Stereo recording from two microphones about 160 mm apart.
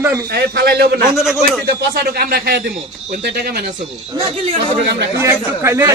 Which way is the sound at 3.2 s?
85° right.